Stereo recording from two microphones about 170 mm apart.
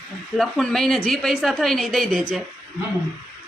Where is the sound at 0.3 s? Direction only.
5° left (ahead or behind).